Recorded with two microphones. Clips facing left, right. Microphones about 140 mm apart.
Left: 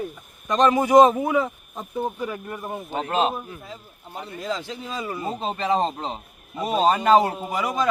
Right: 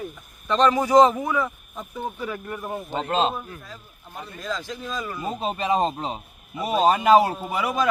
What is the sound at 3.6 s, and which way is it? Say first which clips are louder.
Speech: left 3 dB; 25° left (ahead or behind).